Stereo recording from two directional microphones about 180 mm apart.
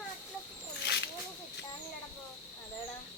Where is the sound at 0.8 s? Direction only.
70° left (ahead or behind).